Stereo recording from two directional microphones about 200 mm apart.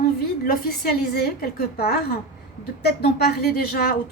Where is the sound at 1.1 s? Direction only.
50° left (ahead or behind).